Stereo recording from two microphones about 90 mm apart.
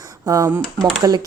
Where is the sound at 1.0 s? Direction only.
50° right (ahead or behind).